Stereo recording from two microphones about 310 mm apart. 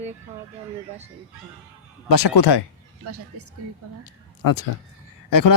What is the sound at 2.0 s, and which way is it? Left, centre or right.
Speech, left.